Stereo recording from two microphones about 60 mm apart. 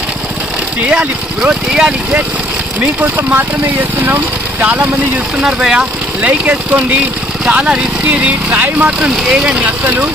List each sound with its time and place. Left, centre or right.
0.8 s speech: centre
2.8 s speech: right
5.4 s speech: centre
6.2 s speech: right
9.1 s speech: centre